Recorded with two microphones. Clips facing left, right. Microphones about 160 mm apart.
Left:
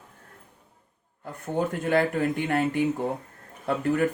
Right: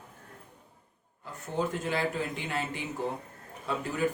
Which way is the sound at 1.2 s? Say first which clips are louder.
Left 4 dB; 55° left (ahead or behind).